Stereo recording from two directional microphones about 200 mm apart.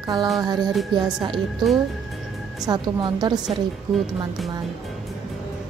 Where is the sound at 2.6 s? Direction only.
20° right (ahead or behind).